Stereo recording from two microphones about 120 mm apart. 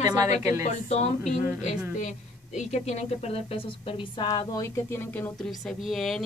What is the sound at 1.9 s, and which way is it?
Speech, 85° left.